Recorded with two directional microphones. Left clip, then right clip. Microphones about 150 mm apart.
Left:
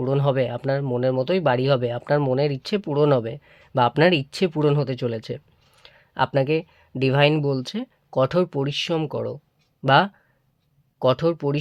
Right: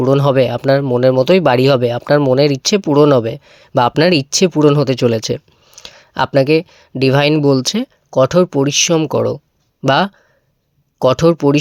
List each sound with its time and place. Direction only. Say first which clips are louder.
0.0 s speech: right 10 dB; 45° right (ahead or behind)
8.1 s speech: right 9 dB; 35° right (ahead or behind)